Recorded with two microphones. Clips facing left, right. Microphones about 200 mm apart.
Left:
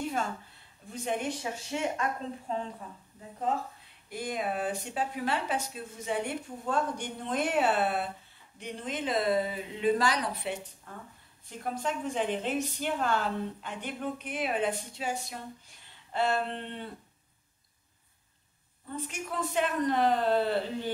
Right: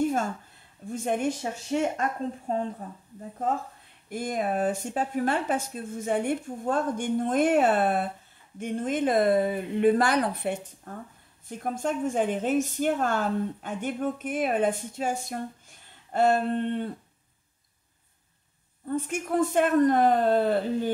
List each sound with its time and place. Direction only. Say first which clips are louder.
0.0 s a sound: right 7 dB; 45° right (ahead or behind)
0.9 s speech: right 5 dB; 50° right (ahead or behind)
18.9 s speech: right 9 dB; 50° right (ahead or behind)